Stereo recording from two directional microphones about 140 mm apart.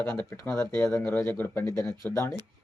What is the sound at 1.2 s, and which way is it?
Speech, 20° left (ahead or behind).